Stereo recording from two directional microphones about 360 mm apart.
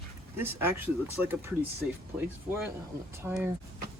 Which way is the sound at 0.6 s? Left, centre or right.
Centre.